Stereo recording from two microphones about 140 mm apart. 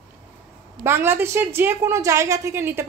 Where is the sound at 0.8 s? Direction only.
15° right (ahead or behind).